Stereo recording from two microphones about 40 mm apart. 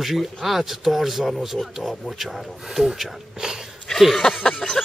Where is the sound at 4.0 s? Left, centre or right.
Centre.